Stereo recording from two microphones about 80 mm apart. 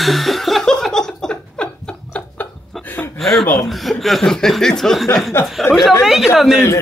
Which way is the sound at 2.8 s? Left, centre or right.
Left.